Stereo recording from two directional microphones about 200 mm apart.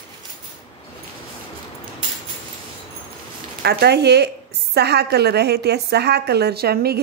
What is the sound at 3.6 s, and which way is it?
A woman's voice, 55° right (ahead or behind).